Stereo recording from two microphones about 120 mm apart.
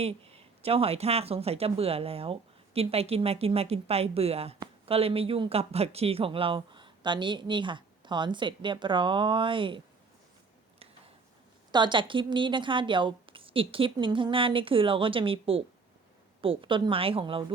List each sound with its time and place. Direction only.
0.0 s speech: 55° right (ahead or behind)
11.7 s speech: 40° right (ahead or behind)